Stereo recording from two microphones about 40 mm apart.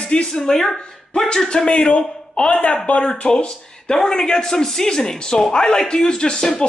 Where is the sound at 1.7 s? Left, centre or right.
Left.